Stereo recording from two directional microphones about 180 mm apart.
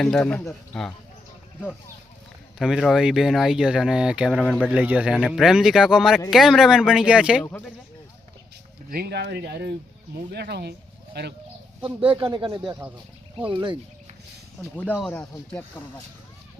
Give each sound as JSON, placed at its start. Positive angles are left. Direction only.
{"t": 0.0, "sound": "speech", "side_deg": 5}
{"t": 2.6, "sound": "speech", "side_deg": 0}
{"t": 4.7, "sound": "speech", "side_deg": -5}
{"t": 8.9, "sound": "speech", "side_deg": -60}
{"t": 11.9, "sound": "speech", "side_deg": -30}
{"t": 14.6, "sound": "speech", "side_deg": 10}